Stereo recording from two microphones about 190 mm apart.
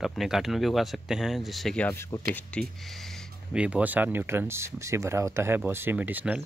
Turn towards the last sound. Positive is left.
turn(degrees=-10)  # may be behind; listen again after turning